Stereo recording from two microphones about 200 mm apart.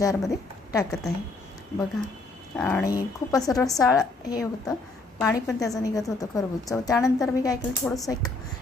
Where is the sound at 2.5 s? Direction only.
10° left (ahead or behind).